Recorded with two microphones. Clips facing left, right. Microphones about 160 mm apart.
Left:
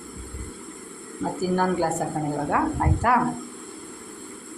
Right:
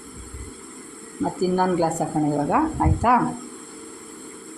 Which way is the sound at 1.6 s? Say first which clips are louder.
Right 2 dB; 15° right (ahead or behind).